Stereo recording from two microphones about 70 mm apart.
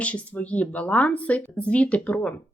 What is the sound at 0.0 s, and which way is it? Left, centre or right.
Speech, left.